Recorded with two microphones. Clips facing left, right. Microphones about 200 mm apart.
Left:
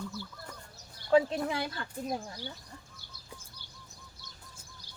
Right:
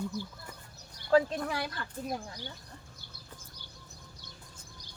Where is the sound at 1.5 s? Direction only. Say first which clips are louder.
Left 1 dB; 20° left (ahead or behind).